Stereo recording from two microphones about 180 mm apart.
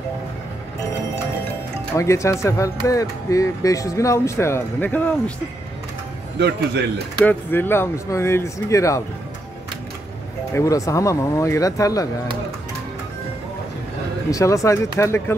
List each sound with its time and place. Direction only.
2.0 s speech: 15° left (ahead or behind)
6.4 s a man's voice: 70° right (ahead or behind)
7.2 s speech: 10° left (ahead or behind)
10.5 s speech: 20° left (ahead or behind)
14.3 s speech: 15° left (ahead or behind)